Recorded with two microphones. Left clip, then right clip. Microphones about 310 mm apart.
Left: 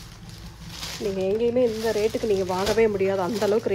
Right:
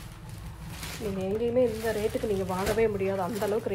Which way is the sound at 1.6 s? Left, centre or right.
Left.